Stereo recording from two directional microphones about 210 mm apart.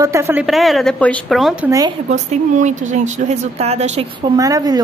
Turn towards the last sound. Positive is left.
turn(degrees=-15)  # may be behind; listen again after turning